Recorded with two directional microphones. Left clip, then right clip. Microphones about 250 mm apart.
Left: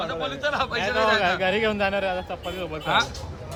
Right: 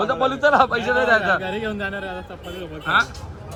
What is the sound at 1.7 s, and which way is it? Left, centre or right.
Speech, left.